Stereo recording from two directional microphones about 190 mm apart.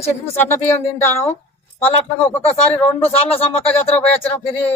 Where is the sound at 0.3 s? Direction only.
10° left (ahead or behind).